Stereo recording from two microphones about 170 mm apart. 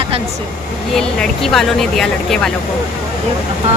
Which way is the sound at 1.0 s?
5° left (ahead or behind).